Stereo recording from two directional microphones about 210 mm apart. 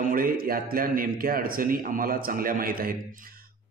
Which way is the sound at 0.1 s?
45° right (ahead or behind).